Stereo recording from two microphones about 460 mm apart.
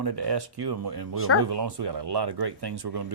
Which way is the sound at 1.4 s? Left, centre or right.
Right.